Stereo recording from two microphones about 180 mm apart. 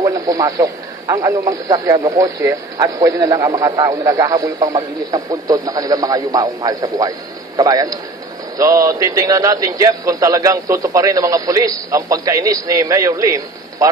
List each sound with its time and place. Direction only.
0.0 s a man's voice: 20° right (ahead or behind)